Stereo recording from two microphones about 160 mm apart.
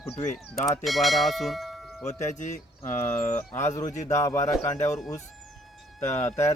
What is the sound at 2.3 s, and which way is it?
Speech, 50° left (ahead or behind).